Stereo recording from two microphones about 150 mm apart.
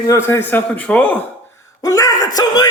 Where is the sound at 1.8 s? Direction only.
20° left (ahead or behind).